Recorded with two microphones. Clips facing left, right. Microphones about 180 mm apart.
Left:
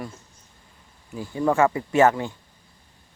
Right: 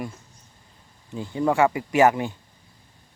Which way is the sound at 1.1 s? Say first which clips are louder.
Even; 20° right (ahead or behind).